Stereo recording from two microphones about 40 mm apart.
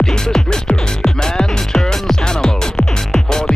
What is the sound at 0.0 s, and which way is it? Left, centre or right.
Music, centre.